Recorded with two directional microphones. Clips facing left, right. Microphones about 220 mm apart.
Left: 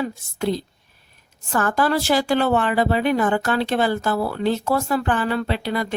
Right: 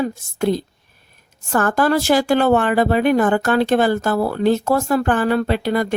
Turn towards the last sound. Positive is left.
turn(degrees=-45)  # may be behind; listen again after turning